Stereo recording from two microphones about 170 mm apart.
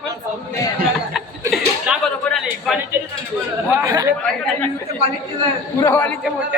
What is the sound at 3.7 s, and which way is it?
Speech, 15° right (ahead or behind).